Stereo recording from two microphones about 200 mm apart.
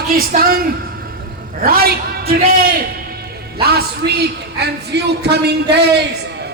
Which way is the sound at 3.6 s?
50° right (ahead or behind).